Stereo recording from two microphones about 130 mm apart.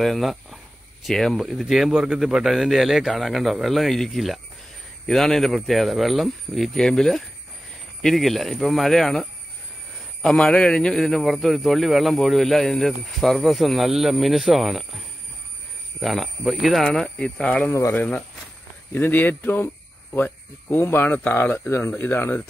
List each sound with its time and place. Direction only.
0.0 s a man's voice: centre (ahead or behind)
17.7 s speech: 20° left (ahead or behind)